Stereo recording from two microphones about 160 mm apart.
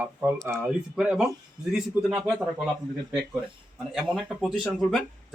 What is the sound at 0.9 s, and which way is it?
Speech, 5° right (ahead or behind).